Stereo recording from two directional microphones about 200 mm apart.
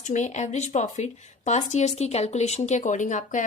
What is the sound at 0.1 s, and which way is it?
Speech, 35° left (ahead or behind).